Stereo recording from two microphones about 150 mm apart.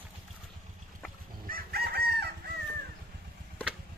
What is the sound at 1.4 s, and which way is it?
Chicken, 80° right.